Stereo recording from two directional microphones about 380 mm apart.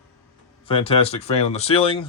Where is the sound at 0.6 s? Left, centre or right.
Centre.